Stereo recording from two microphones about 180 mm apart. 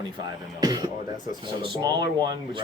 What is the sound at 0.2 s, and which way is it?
Speech, 20° right (ahead or behind).